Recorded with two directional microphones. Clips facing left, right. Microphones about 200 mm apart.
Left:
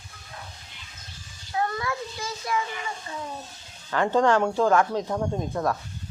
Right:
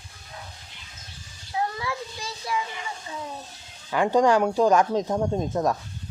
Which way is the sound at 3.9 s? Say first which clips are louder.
Right 1 dB; 15° right (ahead or behind).